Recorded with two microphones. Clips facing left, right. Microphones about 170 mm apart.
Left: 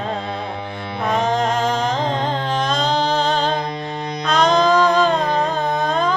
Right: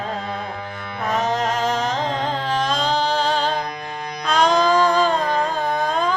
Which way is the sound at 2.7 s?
10° right (ahead or behind).